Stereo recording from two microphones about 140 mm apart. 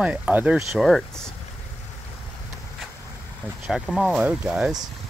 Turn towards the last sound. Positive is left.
turn(degrees=-5)  # may be behind; listen again after turning